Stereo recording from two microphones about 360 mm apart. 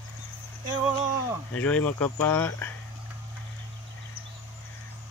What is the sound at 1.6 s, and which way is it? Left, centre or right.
Speech, centre.